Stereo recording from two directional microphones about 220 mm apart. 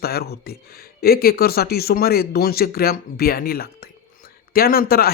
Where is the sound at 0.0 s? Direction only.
45° left (ahead or behind).